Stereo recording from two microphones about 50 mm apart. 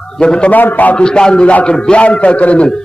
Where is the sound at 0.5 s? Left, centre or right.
Left.